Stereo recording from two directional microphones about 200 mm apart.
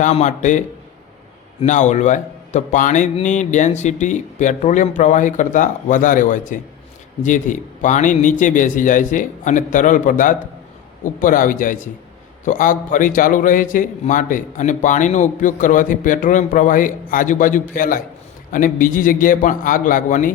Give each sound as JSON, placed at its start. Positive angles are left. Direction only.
{"t": 0.0, "sound": "a man's voice", "side_deg": 35}
{"t": 1.6, "sound": "a man's voice", "side_deg": 35}